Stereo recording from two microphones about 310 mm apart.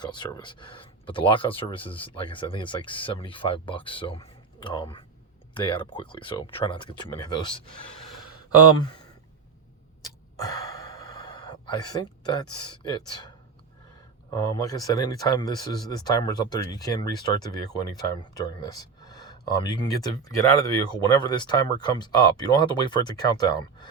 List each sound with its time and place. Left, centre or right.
0.0 s speech: centre
10.4 s gasp: centre
14.3 s speech: centre